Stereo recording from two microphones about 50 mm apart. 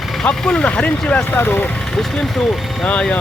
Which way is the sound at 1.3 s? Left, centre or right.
Left.